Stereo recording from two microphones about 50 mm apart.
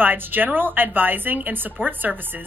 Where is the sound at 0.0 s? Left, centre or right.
Right.